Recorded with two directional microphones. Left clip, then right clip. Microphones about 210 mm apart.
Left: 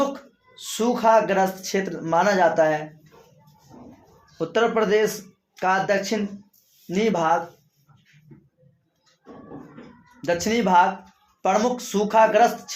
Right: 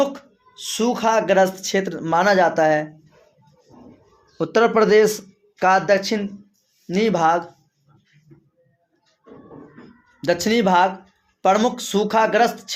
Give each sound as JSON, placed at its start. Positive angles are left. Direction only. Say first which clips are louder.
{"t": 0.0, "sound": "speech", "louder": "right 3 dB", "side_deg": -40}
{"t": 4.4, "sound": "speech", "louder": "right 5 dB", "side_deg": -50}
{"t": 10.2, "sound": "speech", "louder": "right 4 dB", "side_deg": -45}